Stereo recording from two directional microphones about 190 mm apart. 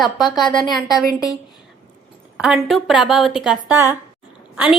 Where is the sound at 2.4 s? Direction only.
5° right (ahead or behind).